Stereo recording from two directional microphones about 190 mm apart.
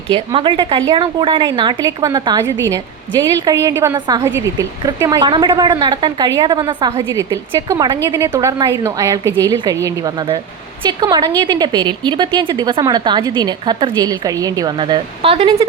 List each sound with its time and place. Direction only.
0.1 s a woman's voice: 25° right (ahead or behind)